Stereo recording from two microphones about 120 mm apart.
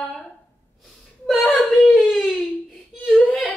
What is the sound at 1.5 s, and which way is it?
Whimper, centre (ahead or behind).